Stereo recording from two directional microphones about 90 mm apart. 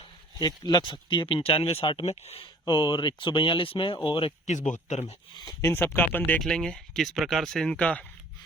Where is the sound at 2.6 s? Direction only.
60° left (ahead or behind).